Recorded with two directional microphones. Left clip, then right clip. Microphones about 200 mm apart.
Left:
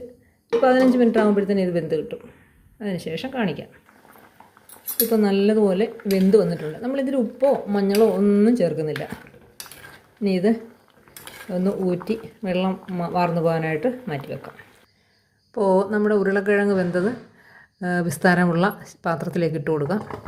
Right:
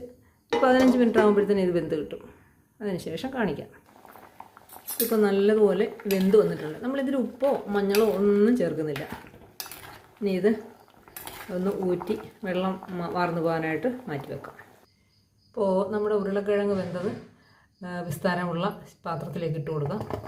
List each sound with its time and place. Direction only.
0.6 s speech: centre (ahead or behind)
4.9 s speech: 15° left (ahead or behind)
10.2 s speech: 15° left (ahead or behind)
11.6 s speech: 15° left (ahead or behind)
15.5 s a woman's voice: 35° left (ahead or behind)